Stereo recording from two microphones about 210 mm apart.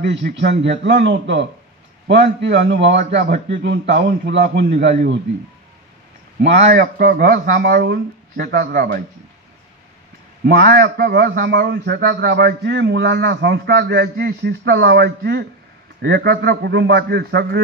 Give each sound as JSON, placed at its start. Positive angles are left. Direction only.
{"t": 0.0, "sound": "a man's voice", "side_deg": -55}
{"t": 6.7, "sound": "a man's voice", "side_deg": -45}
{"t": 10.4, "sound": "a man's voice", "side_deg": -50}